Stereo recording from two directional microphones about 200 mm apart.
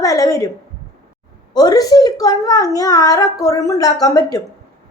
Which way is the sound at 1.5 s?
20° left (ahead or behind).